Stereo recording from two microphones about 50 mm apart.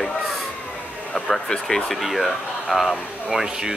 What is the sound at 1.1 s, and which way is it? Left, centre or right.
Speech, centre.